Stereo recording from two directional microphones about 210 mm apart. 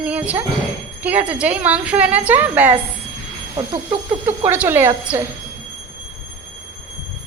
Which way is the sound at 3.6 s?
20° right (ahead or behind).